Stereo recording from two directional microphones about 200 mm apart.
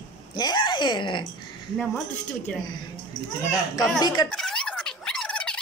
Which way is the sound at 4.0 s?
20° left (ahead or behind).